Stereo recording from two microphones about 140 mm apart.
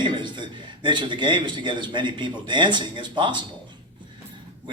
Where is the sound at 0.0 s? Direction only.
35° right (ahead or behind).